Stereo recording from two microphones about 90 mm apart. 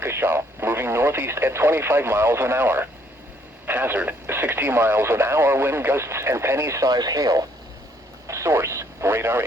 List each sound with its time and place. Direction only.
0.0 s speech: 25° right (ahead or behind)
6.9 s speech: 45° right (ahead or behind)
8.3 s speech: 30° right (ahead or behind)